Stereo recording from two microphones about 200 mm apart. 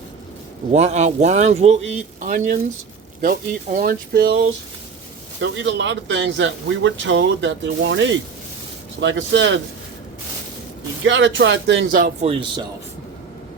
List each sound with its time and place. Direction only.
0.7 s speech: 35° right (ahead or behind); by 4.4 s 50° right (ahead or behind)
5.4 s a man's voice: 65° right (ahead or behind)
11.0 s a man's voice: 65° right (ahead or behind)
11.9 s speech: 45° right (ahead or behind)
12.2 s speech: 30° right (ahead or behind)